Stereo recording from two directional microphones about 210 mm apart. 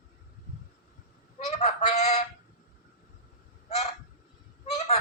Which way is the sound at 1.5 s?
35° left (ahead or behind).